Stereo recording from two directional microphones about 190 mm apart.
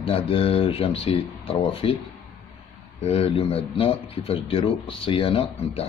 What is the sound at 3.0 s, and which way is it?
Speech, 30° left (ahead or behind).